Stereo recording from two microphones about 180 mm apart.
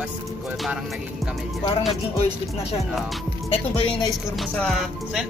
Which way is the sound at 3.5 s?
30° left (ahead or behind).